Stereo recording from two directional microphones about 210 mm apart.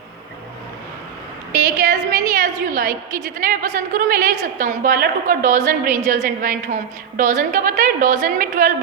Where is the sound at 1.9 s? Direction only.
40° right (ahead or behind).